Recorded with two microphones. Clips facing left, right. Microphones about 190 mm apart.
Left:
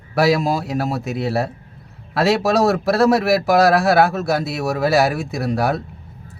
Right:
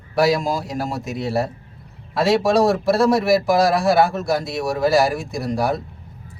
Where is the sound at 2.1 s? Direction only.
65° left (ahead or behind).